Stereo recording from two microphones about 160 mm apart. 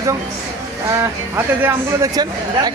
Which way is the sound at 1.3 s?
15° right (ahead or behind).